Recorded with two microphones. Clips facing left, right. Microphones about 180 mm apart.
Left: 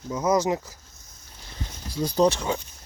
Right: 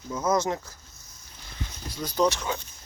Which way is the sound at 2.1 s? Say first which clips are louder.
Left 3 dB; 30° left (ahead or behind).